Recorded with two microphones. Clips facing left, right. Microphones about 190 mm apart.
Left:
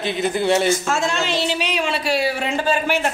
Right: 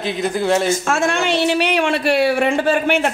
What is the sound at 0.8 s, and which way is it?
Speech, 60° right (ahead or behind).